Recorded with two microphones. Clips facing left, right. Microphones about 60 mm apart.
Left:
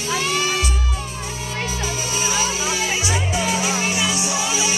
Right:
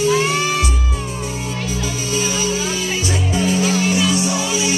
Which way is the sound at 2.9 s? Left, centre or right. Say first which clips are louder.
Right 1 dB; centre.